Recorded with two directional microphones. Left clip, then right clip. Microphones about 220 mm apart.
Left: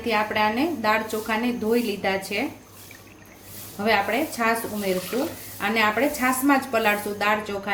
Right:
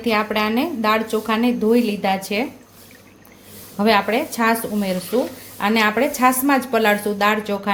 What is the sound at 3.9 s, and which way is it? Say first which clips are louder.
Speech: right 4 dB; 40° right (ahead or behind).